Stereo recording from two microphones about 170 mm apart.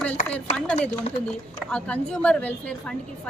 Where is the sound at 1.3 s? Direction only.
5° left (ahead or behind).